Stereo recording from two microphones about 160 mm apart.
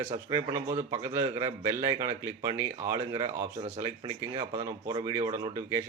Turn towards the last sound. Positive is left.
turn(degrees=-20)  # may be behind; listen again after turning